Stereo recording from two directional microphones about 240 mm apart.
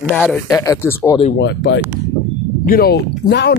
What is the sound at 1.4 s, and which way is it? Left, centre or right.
Speech, left.